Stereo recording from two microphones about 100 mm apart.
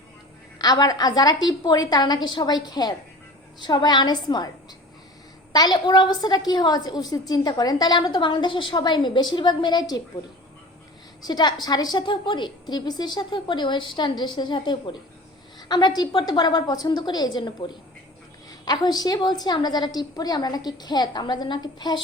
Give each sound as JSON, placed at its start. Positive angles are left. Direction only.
{"t": 0.6, "sound": "a woman's voice", "side_deg": 40}
{"t": 5.5, "sound": "a woman's voice", "side_deg": 45}
{"t": 11.3, "sound": "a woman's voice", "side_deg": 45}